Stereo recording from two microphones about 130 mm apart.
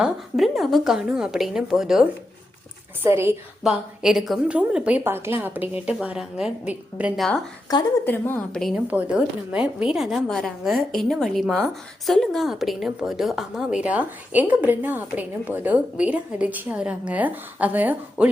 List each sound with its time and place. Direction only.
0.0 s a woman's voice: centre (ahead or behind)
3.0 s a woman's voice: 20° right (ahead or behind)
3.6 s a woman's voice: 5° right (ahead or behind)
7.2 s a woman's voice: centre (ahead or behind)
7.7 s a woman's voice: 30° left (ahead or behind)
8.0 s a woman's voice: 15° left (ahead or behind)
8.7 s a woman's voice: 10° right (ahead or behind)